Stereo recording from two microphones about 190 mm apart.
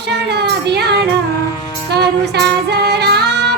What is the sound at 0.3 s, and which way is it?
Music, 60° right (ahead or behind).